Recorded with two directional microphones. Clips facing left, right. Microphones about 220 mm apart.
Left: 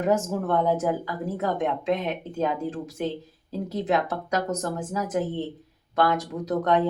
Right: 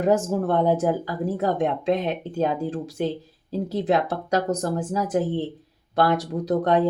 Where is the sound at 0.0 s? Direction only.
35° right (ahead or behind).